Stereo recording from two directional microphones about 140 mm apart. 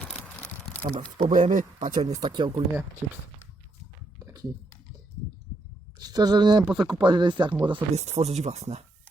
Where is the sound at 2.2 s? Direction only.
35° right (ahead or behind).